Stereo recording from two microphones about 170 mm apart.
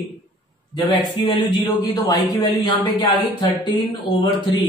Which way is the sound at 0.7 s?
30° left (ahead or behind).